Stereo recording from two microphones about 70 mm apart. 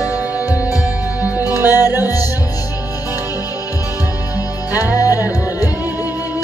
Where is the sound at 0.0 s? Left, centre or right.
Centre.